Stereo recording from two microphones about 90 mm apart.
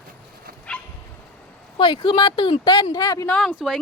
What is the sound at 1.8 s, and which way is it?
Speech, 70° left (ahead or behind).